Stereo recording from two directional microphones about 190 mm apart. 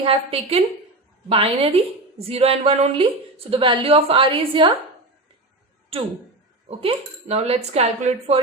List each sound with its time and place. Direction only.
0.0 s a woman's voice: 30° right (ahead or behind)
6.7 s speech: 35° right (ahead or behind)